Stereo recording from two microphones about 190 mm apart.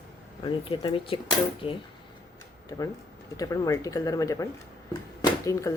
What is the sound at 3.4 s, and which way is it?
Speech, 20° left (ahead or behind).